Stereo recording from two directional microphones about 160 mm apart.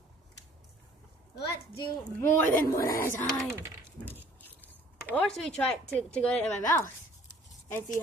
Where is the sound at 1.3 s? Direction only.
90° left.